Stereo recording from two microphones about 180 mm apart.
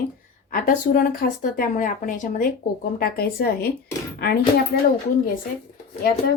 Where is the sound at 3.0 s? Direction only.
60° left (ahead or behind).